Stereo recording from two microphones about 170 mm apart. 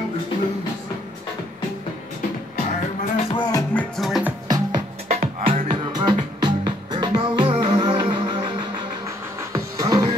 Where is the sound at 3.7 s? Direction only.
Centre (ahead or behind).